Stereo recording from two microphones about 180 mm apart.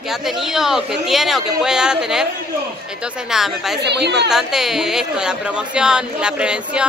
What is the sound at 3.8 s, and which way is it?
Speech, 70° right (ahead or behind).